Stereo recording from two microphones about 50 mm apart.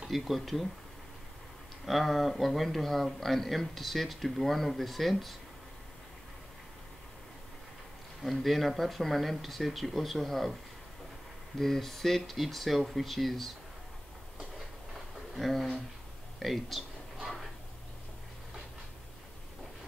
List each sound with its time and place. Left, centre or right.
0.1 s speech: centre
1.9 s speech: centre
8.2 s speech: centre
11.5 s speech: centre
15.3 s speech: centre